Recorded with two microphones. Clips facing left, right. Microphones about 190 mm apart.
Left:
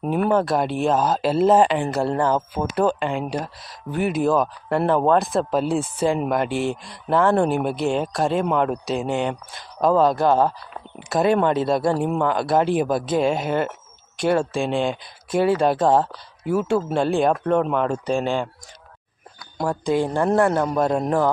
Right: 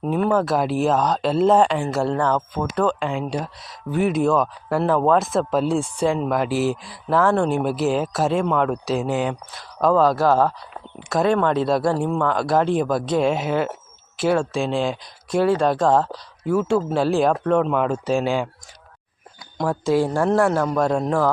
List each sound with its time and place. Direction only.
0.0 s speech: 10° left (ahead or behind); by 18.4 s 10° right (ahead or behind)
19.5 s speech: 5° left (ahead or behind)